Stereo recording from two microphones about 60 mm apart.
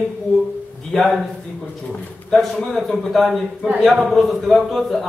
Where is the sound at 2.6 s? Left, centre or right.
Centre.